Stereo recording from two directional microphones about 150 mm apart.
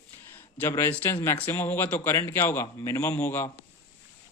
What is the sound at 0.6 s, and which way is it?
A man's voice, 15° left (ahead or behind).